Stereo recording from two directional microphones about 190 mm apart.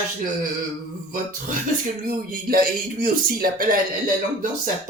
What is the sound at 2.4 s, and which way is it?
Speech, 50° right (ahead or behind).